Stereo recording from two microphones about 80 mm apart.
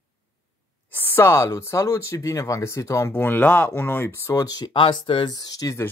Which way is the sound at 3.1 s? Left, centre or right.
Left.